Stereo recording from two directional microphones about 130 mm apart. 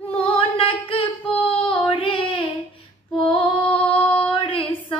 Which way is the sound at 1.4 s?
40° left (ahead or behind).